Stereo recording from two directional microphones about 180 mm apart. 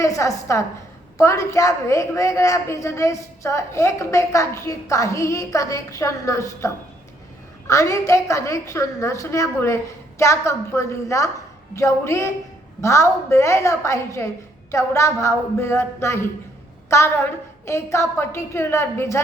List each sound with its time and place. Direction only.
0.0 s a woman's voice: 15° left (ahead or behind)
7.7 s a woman's voice: 15° left (ahead or behind)